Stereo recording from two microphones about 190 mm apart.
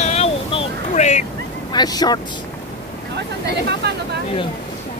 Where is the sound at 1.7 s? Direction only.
20° left (ahead or behind).